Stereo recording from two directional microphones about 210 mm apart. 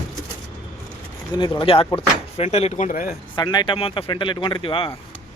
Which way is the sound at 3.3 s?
20° left (ahead or behind).